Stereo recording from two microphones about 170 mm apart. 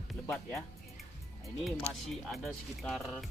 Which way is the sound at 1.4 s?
Centre (ahead or behind).